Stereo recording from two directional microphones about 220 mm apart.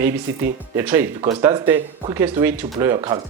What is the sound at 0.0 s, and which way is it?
Speech, 10° right (ahead or behind).